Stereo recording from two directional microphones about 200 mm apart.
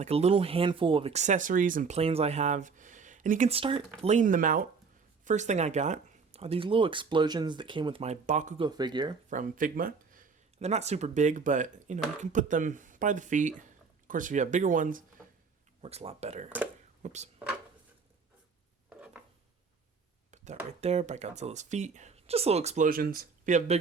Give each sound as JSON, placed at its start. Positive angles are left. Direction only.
{"t": 0.0, "sound": "speech", "side_deg": -30}
{"t": 4.0, "sound": "speech", "side_deg": -40}
{"t": 8.6, "sound": "speech", "side_deg": -20}
{"t": 9.3, "sound": "speech", "side_deg": -40}
{"t": 15.8, "sound": "speech", "side_deg": -30}
{"t": 18.9, "sound": "a sound", "side_deg": -5}
{"t": 20.3, "sound": "a sound", "side_deg": -35}
{"t": 20.7, "sound": "speech", "side_deg": -35}